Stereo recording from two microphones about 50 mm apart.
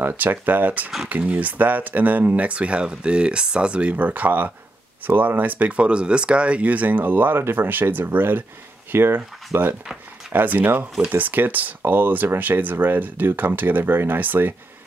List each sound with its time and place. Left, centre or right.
0.1 s speech: right